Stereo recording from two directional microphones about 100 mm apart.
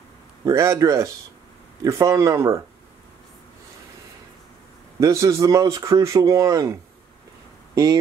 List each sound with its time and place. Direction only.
0.5 s speech: 35° right (ahead or behind)
5.0 s speech: 30° right (ahead or behind)